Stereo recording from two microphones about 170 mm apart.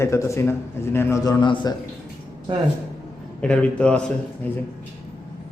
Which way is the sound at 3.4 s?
5° left (ahead or behind).